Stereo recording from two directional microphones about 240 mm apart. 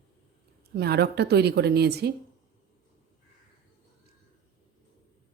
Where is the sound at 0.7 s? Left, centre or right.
Right.